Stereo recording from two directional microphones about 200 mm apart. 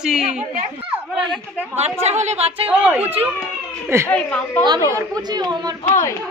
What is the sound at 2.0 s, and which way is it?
Speech, 35° right (ahead or behind).